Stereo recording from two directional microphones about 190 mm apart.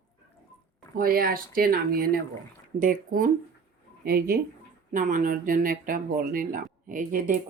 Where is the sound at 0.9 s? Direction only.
50° right (ahead or behind).